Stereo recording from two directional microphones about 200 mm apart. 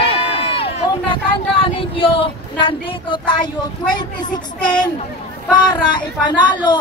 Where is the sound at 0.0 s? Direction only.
30° left (ahead or behind).